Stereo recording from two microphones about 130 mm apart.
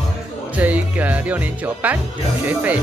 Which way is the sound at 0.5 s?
10° right (ahead or behind).